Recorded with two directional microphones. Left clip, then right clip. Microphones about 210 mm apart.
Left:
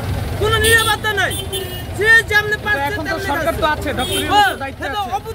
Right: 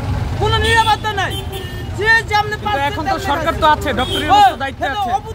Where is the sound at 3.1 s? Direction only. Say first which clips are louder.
Right 2 dB; 50° right (ahead or behind).